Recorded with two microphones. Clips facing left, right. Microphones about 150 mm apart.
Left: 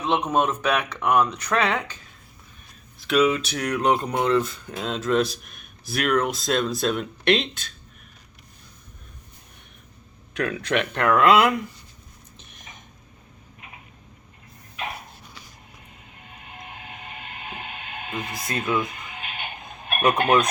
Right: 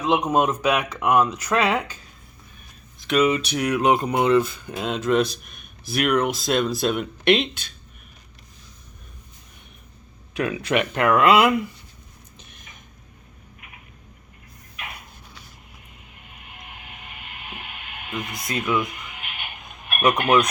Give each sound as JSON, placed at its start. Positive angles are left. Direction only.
{"t": 0.0, "sound": "speech", "side_deg": -10}
{"t": 3.0, "sound": "speech", "side_deg": 5}
{"t": 10.3, "sound": "speech", "side_deg": -10}
{"t": 13.6, "sound": "a sound", "side_deg": 25}
{"t": 16.1, "sound": "vehicle", "side_deg": 30}
{"t": 18.1, "sound": "music", "side_deg": 30}